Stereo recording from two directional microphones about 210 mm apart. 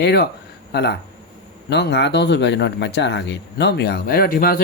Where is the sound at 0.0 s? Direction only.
55° left (ahead or behind).